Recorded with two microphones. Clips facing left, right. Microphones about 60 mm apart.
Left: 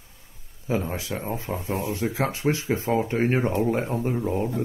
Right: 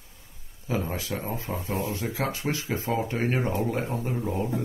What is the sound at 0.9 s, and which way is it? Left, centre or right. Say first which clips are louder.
Speech: left 2 dB; left.